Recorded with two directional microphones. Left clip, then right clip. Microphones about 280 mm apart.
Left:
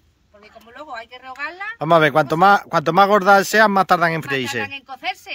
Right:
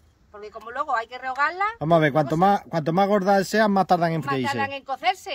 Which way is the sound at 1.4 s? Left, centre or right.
Centre.